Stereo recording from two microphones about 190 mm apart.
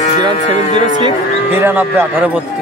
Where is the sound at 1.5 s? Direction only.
10° right (ahead or behind).